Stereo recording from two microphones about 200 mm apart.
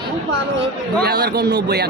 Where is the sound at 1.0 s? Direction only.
55° right (ahead or behind).